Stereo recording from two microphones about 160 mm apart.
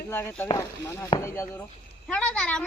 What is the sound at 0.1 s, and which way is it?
Speech, 15° left (ahead or behind).